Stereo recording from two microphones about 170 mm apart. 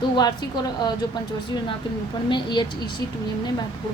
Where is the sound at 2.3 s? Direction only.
25° left (ahead or behind).